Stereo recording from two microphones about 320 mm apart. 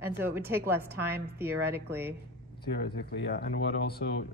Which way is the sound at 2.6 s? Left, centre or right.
Left.